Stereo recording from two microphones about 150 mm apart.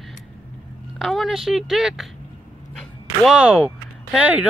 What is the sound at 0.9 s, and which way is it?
A woman's voice, centre (ahead or behind).